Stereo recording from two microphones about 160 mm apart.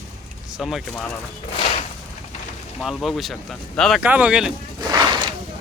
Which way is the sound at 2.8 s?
Centre (ahead or behind).